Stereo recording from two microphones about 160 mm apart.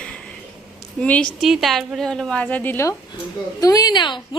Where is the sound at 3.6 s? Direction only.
25° left (ahead or behind).